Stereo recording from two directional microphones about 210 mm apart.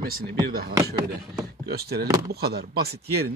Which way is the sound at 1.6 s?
50° right (ahead or behind).